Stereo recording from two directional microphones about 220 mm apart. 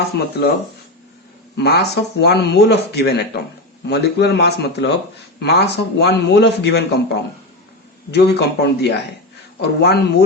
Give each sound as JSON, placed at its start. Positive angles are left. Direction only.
{"t": 0.1, "sound": "a man's voice", "side_deg": 50}
{"t": 1.5, "sound": "a man's voice", "side_deg": 50}